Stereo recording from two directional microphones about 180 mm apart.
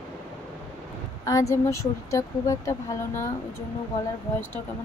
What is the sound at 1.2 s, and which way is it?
Speech, 20° left (ahead or behind).